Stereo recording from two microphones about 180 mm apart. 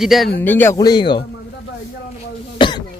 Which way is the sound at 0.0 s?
Centre (ahead or behind).